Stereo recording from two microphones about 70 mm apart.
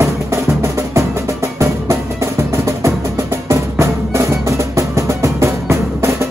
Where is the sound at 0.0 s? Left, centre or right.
Right.